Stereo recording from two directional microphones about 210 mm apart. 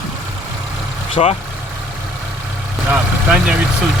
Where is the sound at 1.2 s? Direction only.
25° left (ahead or behind).